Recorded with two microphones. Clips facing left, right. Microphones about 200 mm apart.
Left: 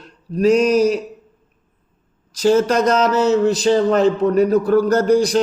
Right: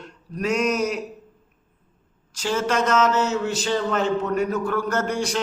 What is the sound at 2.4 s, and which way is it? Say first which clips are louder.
Speech: left 8 dB; 40° left (ahead or behind).